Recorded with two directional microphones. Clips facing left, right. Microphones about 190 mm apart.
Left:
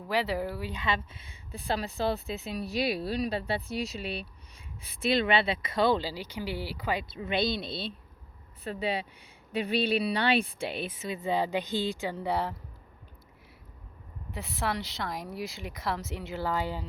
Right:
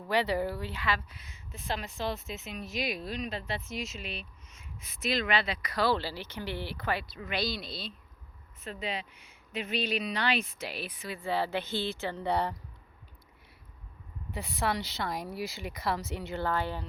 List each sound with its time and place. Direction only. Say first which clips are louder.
0.1 s speech: right 1 dB; centre (ahead or behind)
0.6 s speech: left 2 dB; 20° left (ahead or behind)
7.1 s speech: left 5 dB; 25° left (ahead or behind); by 12.5 s 5° left (ahead or behind)
14.3 s speech: right 1 dB; centre (ahead or behind)